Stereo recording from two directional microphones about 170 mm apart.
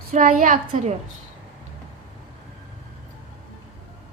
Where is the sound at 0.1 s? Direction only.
50° right (ahead or behind).